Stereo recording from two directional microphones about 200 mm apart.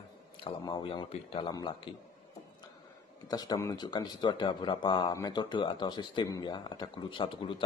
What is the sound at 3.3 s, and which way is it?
Speech, 20° left (ahead or behind).